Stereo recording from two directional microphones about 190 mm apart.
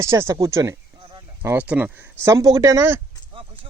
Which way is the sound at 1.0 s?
25° right (ahead or behind).